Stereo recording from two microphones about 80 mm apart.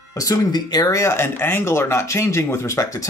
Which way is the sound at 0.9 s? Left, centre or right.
Left.